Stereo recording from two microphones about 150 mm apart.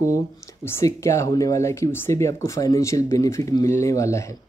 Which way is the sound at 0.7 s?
20° left (ahead or behind).